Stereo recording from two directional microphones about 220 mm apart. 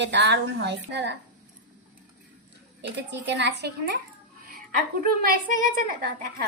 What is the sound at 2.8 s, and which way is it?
A woman's voice, 50° right (ahead or behind).